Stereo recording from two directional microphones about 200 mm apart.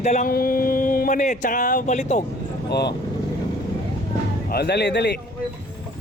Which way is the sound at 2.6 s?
55° left (ahead or behind).